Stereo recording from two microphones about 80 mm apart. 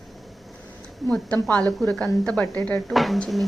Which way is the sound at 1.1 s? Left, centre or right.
Centre.